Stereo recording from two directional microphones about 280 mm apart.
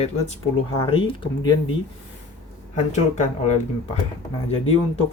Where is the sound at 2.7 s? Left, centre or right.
Left.